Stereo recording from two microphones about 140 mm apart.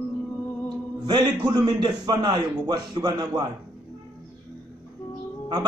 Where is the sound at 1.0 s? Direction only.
30° right (ahead or behind).